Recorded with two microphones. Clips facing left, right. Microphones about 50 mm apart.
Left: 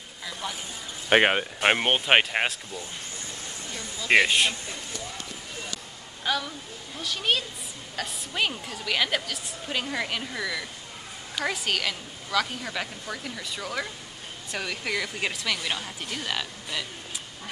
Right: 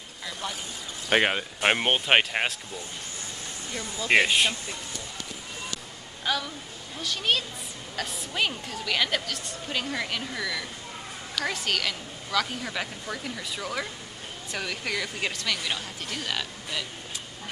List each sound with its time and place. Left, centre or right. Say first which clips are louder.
1.0 s speech: left 3 dB; left
1.6 s a woman's voice: even; centre
4.1 s a woman's voice: left 1 dB; centre
6.2 s a woman's voice: left 1 dB; centre